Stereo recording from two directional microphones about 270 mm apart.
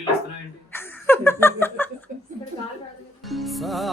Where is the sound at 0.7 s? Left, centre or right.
Centre.